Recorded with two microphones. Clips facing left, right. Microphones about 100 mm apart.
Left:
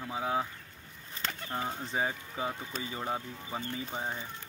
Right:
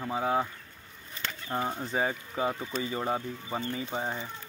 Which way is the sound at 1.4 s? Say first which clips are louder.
Right 5 dB; 15° right (ahead or behind).